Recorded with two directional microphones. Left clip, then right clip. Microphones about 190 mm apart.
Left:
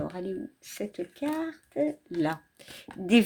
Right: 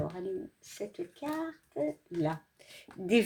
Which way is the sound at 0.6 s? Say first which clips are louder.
Left 4 dB; 40° left (ahead or behind).